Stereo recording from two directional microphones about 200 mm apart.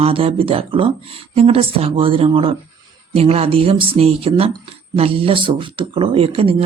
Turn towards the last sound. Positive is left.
turn(degrees=-25)  # may be behind; listen again after turning